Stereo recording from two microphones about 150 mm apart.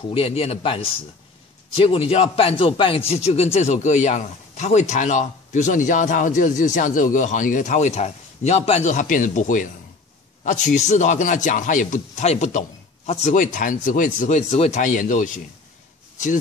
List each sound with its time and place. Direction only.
0.1 s a man's voice: 40° left (ahead or behind); by 15.4 s 60° left (ahead or behind)